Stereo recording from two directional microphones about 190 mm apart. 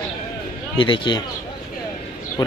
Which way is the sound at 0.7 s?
25° left (ahead or behind).